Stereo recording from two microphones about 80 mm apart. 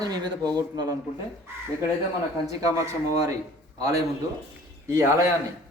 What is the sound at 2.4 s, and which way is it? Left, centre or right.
A man's voice, right.